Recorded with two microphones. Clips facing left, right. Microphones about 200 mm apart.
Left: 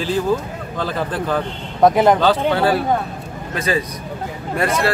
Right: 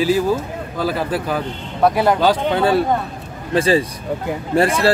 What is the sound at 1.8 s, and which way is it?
Speech, 20° left (ahead or behind).